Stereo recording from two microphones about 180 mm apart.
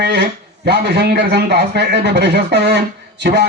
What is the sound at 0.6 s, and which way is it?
A man's voice, 70° right (ahead or behind).